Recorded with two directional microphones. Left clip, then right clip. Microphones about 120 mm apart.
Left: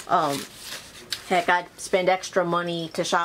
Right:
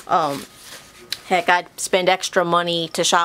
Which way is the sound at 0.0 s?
30° right (ahead or behind).